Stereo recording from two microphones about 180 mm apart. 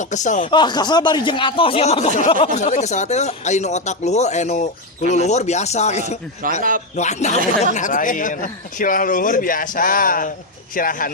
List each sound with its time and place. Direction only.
0.0 s speech: 45° left (ahead or behind)
0.4 s speech: 25° left (ahead or behind)
6.6 s a man's voice: 50° right (ahead or behind)
6.9 s speech: 40° left (ahead or behind)